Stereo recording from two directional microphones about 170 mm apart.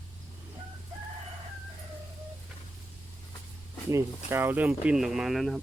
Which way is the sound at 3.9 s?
15° right (ahead or behind).